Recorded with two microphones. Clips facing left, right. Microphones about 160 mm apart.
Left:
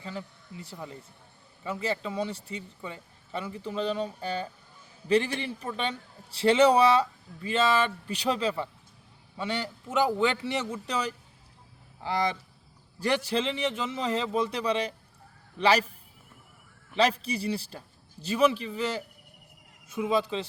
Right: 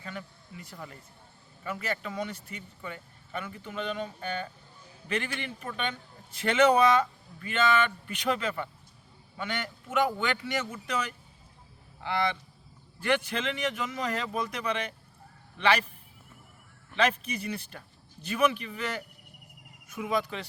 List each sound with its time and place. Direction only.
0.0 s speech: 25° left (ahead or behind)
17.0 s speech: 35° left (ahead or behind)